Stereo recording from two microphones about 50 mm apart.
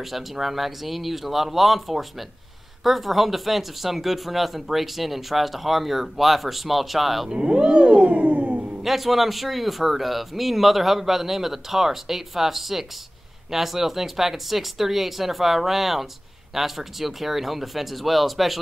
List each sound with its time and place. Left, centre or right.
0.0 s speech: centre
7.2 s a sound: centre
8.8 s speech: centre